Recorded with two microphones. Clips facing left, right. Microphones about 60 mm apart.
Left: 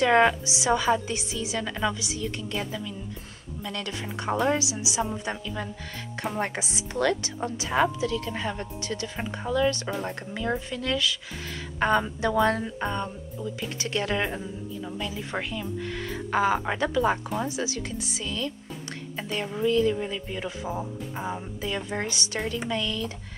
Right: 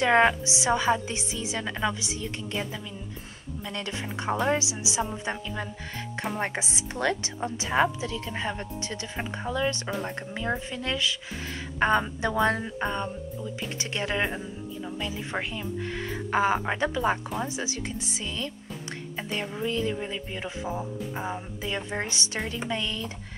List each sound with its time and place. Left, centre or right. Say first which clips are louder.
0.0 s a woman's voice: left 1 dB; right
3.6 s a woman's voice: left 1 dB; right
9.8 s speech: left 1 dB; centre
10.3 s a woman's voice: left 2 dB; right
19.6 s a woman's voice: left 7 dB; right